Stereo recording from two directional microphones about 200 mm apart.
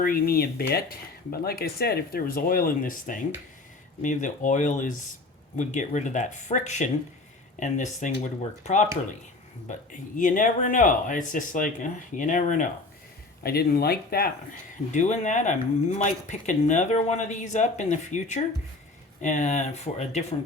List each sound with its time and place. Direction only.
0.0 s speech: 45° left (ahead or behind)
10.2 s speech: 40° left (ahead or behind)
14.9 s speech: 35° left (ahead or behind)